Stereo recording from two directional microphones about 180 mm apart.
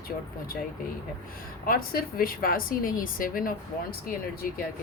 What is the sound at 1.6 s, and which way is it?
A woman's voice, 55° left (ahead or behind).